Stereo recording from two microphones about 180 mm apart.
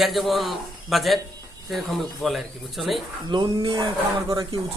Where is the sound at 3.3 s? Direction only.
25° right (ahead or behind).